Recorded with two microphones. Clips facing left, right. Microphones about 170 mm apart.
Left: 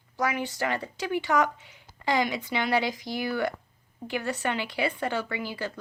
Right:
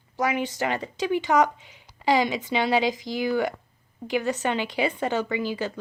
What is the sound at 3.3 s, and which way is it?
Speech, 15° right (ahead or behind).